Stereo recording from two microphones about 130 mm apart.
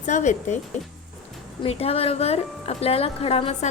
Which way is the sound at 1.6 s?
50° left (ahead or behind).